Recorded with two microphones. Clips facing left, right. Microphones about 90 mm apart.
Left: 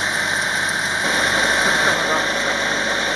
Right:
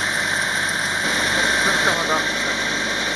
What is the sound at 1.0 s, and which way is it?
Engine, 35° left (ahead or behind).